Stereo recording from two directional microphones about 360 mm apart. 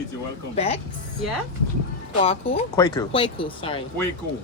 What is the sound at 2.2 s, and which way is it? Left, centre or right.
Speech, centre.